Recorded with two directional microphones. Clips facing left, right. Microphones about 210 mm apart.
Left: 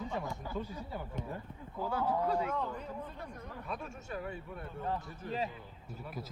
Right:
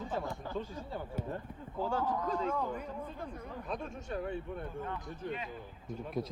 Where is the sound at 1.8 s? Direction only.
10° left (ahead or behind).